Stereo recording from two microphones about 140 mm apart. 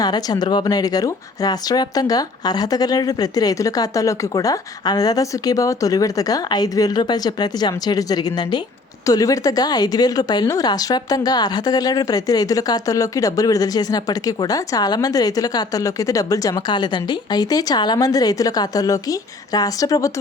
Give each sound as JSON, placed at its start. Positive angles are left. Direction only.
{"t": 0.0, "sound": "speech", "side_deg": 30}